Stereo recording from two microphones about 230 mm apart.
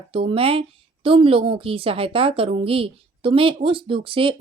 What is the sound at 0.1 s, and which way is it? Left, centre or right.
A woman's voice, right.